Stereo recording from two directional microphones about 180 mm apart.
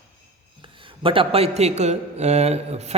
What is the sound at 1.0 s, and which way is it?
A man's voice, 30° right (ahead or behind).